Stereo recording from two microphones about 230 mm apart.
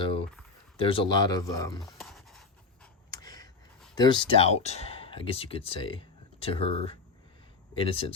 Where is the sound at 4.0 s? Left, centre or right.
Left.